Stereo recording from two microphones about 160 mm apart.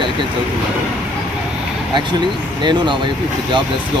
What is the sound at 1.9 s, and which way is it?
Speech, 30° right (ahead or behind).